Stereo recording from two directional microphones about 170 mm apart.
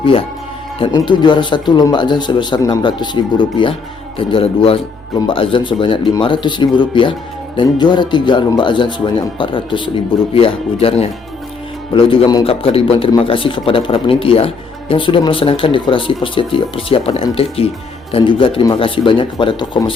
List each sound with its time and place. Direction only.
0.0 s a man's voice: 30° left (ahead or behind)